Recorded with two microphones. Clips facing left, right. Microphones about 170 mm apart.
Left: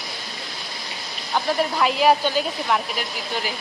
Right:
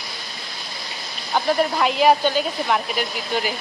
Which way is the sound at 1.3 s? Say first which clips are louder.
Right 2 dB; centre (ahead or behind).